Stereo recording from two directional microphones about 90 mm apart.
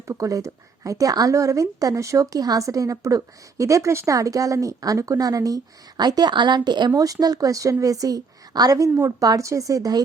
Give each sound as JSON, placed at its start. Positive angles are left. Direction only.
{"t": 0.1, "sound": "a woman's voice", "side_deg": -40}